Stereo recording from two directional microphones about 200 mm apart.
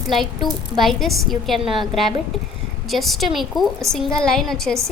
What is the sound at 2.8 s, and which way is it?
A woman's voice, centre (ahead or behind).